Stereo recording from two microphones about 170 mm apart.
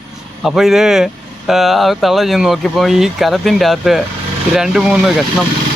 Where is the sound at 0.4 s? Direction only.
Centre (ahead or behind).